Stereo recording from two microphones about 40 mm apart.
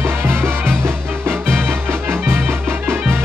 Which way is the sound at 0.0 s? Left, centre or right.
Right.